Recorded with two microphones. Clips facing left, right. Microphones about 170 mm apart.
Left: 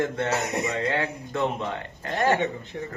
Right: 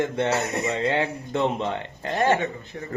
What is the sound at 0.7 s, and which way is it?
Speech, 20° right (ahead or behind).